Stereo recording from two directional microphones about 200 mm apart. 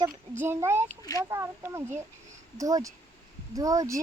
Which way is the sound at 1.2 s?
15° right (ahead or behind).